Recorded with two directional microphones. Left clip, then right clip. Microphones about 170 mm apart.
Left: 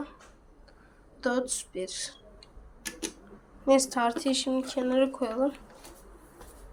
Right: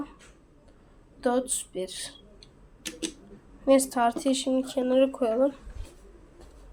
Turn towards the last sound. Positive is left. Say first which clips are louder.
# right 4 dB
turn(degrees=-25)  # may be behind; listen again after turning